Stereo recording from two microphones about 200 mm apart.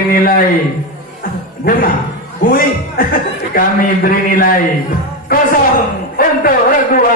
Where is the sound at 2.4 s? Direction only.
45° left (ahead or behind).